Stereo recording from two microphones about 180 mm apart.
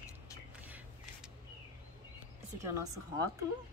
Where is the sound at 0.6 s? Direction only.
10° right (ahead or behind).